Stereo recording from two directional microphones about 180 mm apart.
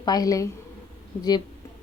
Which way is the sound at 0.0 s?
20° left (ahead or behind).